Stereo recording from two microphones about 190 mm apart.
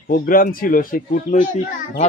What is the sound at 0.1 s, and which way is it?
A man's voice, 45° left (ahead or behind).